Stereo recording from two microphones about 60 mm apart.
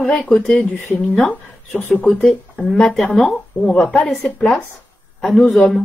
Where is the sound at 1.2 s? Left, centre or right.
Left.